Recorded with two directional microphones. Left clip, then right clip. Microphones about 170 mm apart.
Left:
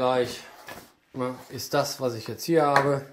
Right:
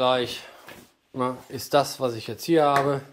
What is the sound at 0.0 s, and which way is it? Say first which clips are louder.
Speech: right 2 dB; 10° right (ahead or behind).